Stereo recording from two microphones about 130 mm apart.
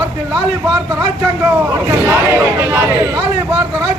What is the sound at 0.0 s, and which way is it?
A man's voice, 30° right (ahead or behind).